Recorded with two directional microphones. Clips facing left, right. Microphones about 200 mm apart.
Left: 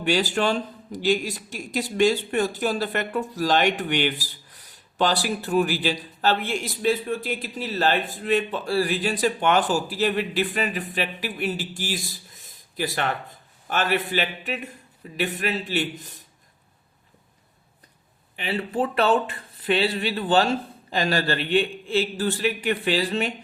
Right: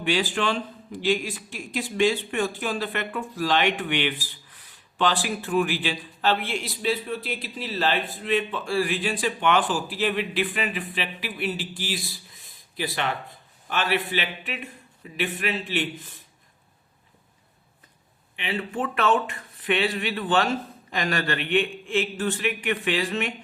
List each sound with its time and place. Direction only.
0.0 s speech: 40° left (ahead or behind)
18.3 s speech: 35° left (ahead or behind)